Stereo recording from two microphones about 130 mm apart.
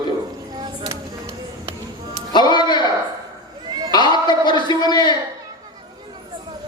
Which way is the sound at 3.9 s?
35° left (ahead or behind).